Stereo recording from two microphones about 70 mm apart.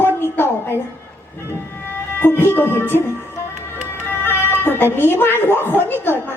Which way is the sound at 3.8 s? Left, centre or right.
Left.